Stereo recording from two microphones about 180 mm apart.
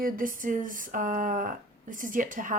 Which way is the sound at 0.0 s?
50° right (ahead or behind).